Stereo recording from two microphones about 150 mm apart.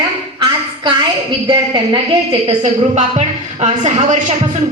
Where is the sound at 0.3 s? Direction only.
30° right (ahead or behind).